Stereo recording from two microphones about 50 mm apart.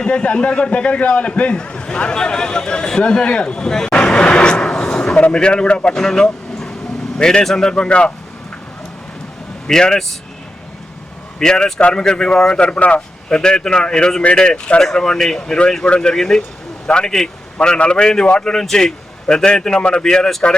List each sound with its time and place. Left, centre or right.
0.0 s a man's voice: left
3.9 s a sound: left
5.1 s a man's voice: left
9.6 s a man's voice: centre
11.3 s a man's voice: centre